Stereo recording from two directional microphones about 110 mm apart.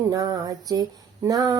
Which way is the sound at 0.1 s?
35° right (ahead or behind).